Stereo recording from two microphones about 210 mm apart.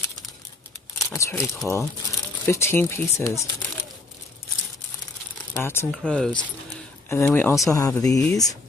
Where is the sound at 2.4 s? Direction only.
10° left (ahead or behind).